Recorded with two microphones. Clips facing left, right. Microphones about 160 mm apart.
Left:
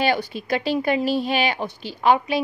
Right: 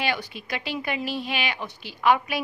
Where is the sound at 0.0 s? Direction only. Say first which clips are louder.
Left 7 dB; 35° left (ahead or behind).